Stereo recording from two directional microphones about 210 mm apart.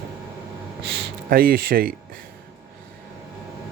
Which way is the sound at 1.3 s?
45° right (ahead or behind).